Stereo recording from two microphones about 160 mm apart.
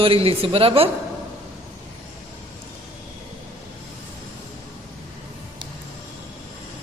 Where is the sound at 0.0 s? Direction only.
35° right (ahead or behind).